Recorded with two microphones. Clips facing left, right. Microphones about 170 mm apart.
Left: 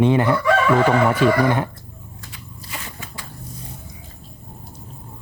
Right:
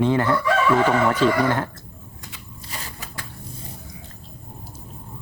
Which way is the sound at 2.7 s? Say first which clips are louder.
Left 2 dB; 40° right (ahead or behind).